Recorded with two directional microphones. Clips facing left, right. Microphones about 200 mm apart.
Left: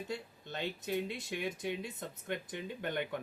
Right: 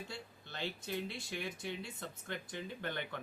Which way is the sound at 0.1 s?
15° left (ahead or behind).